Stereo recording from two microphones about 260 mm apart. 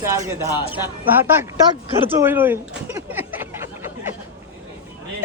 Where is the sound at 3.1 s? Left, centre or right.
Centre.